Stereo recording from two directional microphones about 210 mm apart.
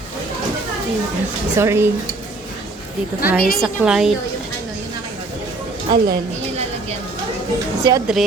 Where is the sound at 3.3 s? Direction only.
45° left (ahead or behind).